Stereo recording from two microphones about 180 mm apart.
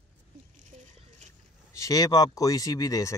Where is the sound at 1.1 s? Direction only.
40° right (ahead or behind).